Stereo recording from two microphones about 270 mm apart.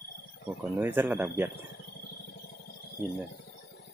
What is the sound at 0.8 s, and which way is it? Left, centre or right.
Speech, centre.